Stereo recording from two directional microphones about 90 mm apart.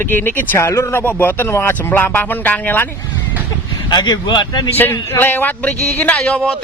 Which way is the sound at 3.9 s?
55° left (ahead or behind).